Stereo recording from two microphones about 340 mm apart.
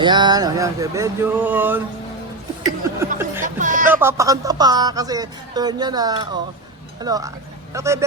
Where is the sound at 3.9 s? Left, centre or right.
Centre.